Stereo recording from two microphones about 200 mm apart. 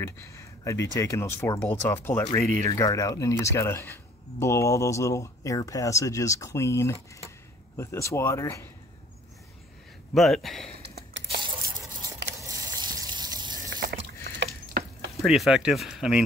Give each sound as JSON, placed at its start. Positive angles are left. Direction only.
{"t": 0.0, "sound": "speech", "side_deg": 15}
{"t": 10.1, "sound": "speech", "side_deg": 0}
{"t": 10.7, "sound": "a sound", "side_deg": -55}
{"t": 11.3, "sound": "a sound", "side_deg": -20}
{"t": 14.8, "sound": "sizzle", "side_deg": -45}
{"t": 15.2, "sound": "speech", "side_deg": 0}